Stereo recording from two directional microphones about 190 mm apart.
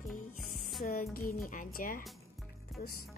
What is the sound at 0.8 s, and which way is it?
Music, 50° left (ahead or behind).